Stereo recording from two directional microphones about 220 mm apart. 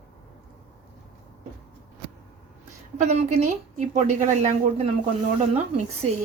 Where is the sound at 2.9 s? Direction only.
30° right (ahead or behind).